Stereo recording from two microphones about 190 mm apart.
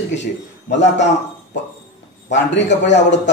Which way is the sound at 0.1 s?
70° left (ahead or behind).